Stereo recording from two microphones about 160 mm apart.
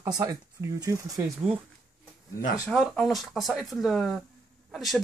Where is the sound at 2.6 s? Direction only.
5° left (ahead or behind).